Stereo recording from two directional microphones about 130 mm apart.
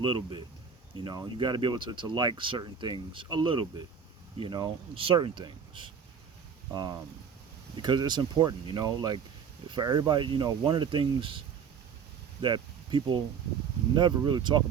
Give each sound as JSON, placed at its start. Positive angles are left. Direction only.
{"t": 0.0, "sound": "speech", "side_deg": -40}
{"t": 7.8, "sound": "speech", "side_deg": -35}
{"t": 12.4, "sound": "a sound", "side_deg": -35}
{"t": 13.9, "sound": "speech", "side_deg": -35}